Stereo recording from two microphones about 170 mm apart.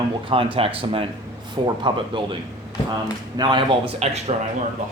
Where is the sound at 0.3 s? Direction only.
35° right (ahead or behind).